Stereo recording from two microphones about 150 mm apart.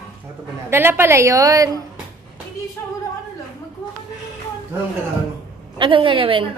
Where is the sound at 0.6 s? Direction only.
15° right (ahead or behind).